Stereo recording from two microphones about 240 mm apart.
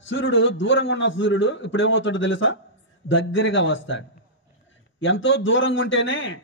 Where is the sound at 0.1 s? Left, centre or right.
Left.